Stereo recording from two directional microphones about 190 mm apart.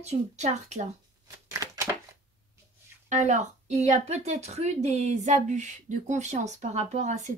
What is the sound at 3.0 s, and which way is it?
A woman's voice, 40° right (ahead or behind).